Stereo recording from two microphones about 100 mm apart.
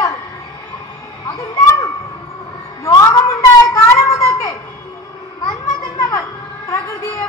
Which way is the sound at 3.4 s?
30° left (ahead or behind).